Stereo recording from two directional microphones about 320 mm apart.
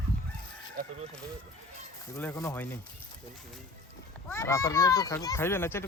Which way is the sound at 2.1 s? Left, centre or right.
Centre.